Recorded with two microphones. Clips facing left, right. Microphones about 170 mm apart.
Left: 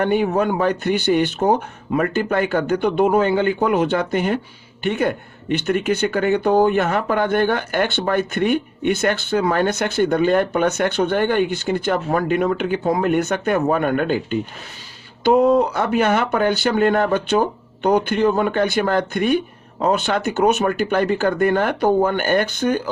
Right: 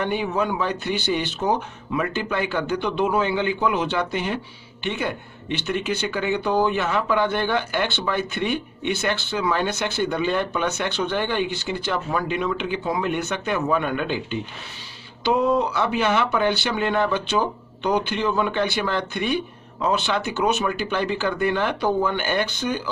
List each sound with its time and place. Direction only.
0.0 s speech: 50° left (ahead or behind)